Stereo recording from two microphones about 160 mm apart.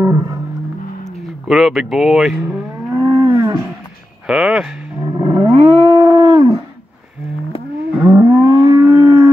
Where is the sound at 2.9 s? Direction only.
20° right (ahead or behind).